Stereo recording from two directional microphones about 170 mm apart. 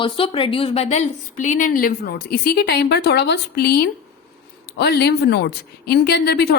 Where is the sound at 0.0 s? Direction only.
30° left (ahead or behind).